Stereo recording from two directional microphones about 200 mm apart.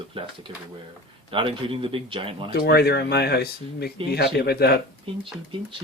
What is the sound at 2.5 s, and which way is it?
Speech, 50° left (ahead or behind).